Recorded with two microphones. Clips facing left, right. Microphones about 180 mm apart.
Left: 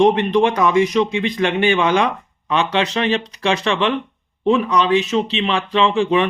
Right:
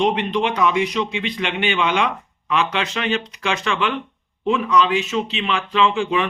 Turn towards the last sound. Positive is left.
turn(degrees=35)  # may be behind; listen again after turning